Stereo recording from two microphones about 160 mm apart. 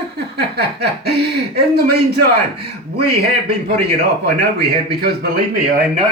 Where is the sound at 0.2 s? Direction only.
90° right.